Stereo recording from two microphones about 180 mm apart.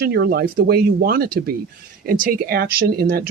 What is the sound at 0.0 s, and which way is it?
Speech, 60° right (ahead or behind).